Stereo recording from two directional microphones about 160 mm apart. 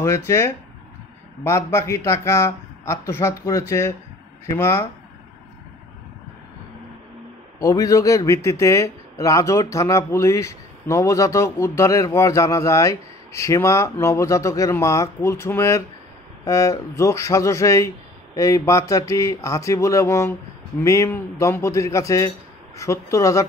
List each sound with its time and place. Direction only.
0.0 s a man's voice: 15° left (ahead or behind)
7.6 s a man's voice: 20° left (ahead or behind)